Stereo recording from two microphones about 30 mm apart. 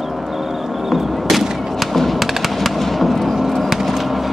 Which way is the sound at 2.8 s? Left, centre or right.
Centre.